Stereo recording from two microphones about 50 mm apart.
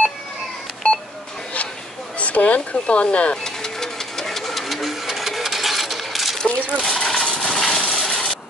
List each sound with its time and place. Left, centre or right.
0.8 s telephone dialing: left
2.1 s speech: left
3.4 s sewing machine: centre
6.3 s a sound: centre
6.8 s coin: centre
7.4 s a sound: centre